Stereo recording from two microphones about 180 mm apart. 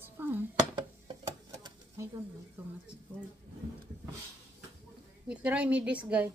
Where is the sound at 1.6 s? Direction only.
15° right (ahead or behind).